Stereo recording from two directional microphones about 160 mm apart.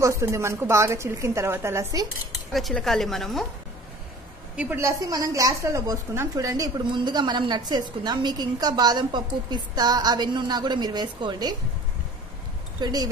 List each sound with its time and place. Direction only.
0.0 s a woman's voice: 20° right (ahead or behind)
2.5 s a woman's voice: centre (ahead or behind)
4.6 s a woman's voice: 15° right (ahead or behind)
12.8 s a woman's voice: 25° right (ahead or behind)